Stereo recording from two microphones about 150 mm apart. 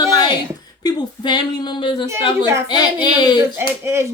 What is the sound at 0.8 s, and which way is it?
Speech, 30° left (ahead or behind).